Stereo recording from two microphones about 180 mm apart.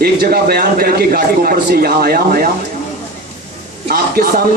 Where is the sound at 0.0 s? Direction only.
55° right (ahead or behind).